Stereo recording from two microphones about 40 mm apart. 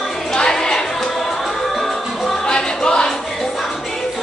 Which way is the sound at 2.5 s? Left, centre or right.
Centre.